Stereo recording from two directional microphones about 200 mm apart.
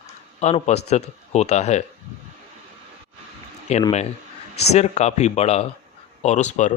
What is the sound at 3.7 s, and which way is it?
Speech, 35° left (ahead or behind).